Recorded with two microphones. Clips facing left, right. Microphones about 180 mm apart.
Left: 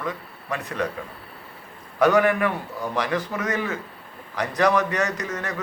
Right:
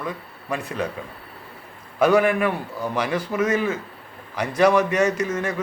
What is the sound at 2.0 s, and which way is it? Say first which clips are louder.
A man's voice: right 1 dB; 10° right (ahead or behind).